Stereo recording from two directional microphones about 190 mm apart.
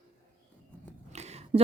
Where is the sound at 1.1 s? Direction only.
35° right (ahead or behind).